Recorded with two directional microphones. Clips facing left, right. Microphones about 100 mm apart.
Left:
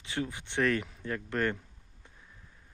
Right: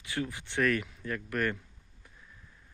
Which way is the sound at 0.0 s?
25° left (ahead or behind).